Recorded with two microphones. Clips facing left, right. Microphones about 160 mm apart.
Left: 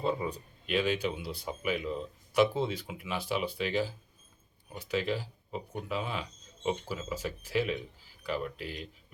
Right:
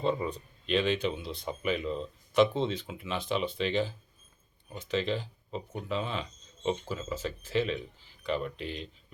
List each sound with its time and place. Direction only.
0.0 s speech: 10° left (ahead or behind)